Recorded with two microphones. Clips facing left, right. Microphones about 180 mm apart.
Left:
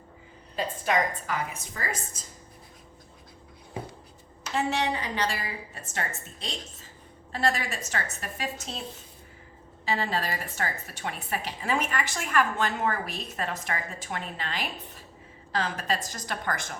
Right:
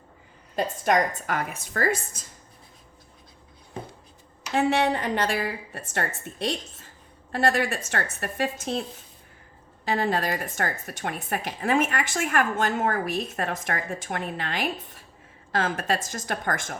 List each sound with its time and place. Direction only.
0.5 s a woman's voice: 45° right (ahead or behind); by 1.9 s 70° right (ahead or behind)
3.8 s writing: 10° left (ahead or behind)
4.5 s a woman's voice: 55° right (ahead or behind)
9.8 s a woman's voice: 50° right (ahead or behind)